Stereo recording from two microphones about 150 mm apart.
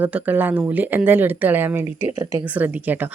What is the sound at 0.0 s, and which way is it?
Speech, 10° right (ahead or behind).